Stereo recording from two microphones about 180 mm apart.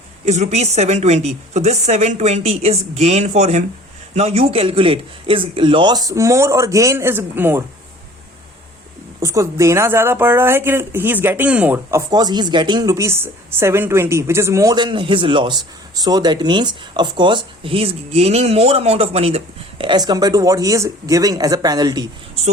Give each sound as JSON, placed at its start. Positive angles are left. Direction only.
{"t": 0.3, "sound": "a woman's voice", "side_deg": -40}
{"t": 9.2, "sound": "a woman's voice", "side_deg": -15}